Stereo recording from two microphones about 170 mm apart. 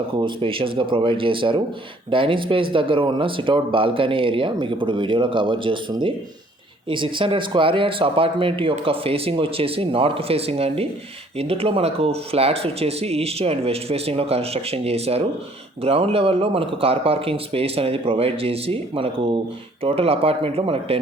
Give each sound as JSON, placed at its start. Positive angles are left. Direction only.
{"t": 0.2, "sound": "speech", "side_deg": -30}